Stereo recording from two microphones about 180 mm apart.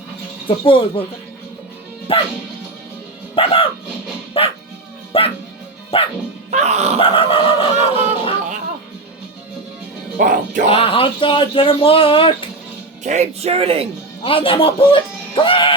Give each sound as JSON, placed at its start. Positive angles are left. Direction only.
{"t": 0.4, "sound": "speech", "side_deg": 30}
{"t": 2.1, "sound": "speech", "side_deg": 30}
{"t": 3.3, "sound": "speech", "side_deg": 30}
{"t": 5.1, "sound": "music", "side_deg": 30}
{"t": 5.9, "sound": "speech", "side_deg": 30}
{"t": 6.5, "sound": "music", "side_deg": -40}
{"t": 7.0, "sound": "snicker", "side_deg": 30}
{"t": 10.2, "sound": "speech", "side_deg": -50}
{"t": 10.7, "sound": "speech", "side_deg": 30}
{"t": 13.1, "sound": "speech", "side_deg": -35}
{"t": 14.3, "sound": "speech", "side_deg": 30}